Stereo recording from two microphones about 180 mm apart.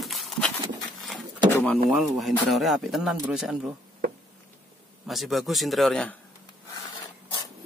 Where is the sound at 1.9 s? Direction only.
Centre (ahead or behind).